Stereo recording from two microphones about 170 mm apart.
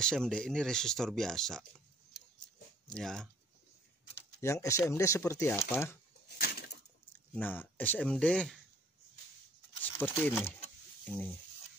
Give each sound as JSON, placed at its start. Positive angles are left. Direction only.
{"t": 0.0, "sound": "speech", "side_deg": 5}
{"t": 2.9, "sound": "speech", "side_deg": 5}
{"t": 4.4, "sound": "speech", "side_deg": 15}
{"t": 6.2, "sound": "a sound", "side_deg": 65}
{"t": 7.3, "sound": "speech", "side_deg": 10}
{"t": 10.0, "sound": "speech", "side_deg": 10}